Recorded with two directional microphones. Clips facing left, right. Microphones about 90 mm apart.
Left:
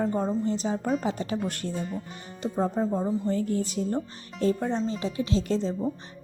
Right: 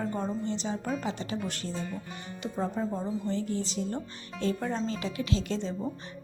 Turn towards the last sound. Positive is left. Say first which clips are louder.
# left 5 dB
turn(degrees=35)  # may be behind; listen again after turning